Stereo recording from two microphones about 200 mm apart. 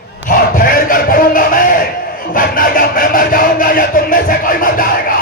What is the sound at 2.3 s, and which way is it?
Speech, 45° left (ahead or behind).